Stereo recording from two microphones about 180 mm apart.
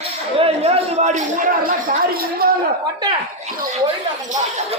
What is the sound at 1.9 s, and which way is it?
Speech, 50° right (ahead or behind).